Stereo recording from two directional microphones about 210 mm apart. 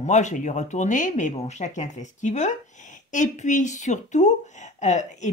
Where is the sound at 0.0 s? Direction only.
35° left (ahead or behind).